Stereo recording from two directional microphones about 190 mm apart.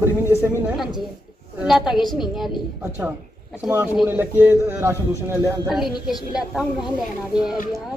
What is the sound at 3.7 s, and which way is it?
A man's voice, 5° right (ahead or behind).